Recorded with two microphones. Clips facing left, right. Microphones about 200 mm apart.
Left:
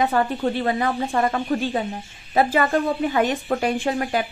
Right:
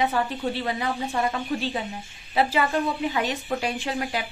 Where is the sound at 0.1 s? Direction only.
55° left (ahead or behind).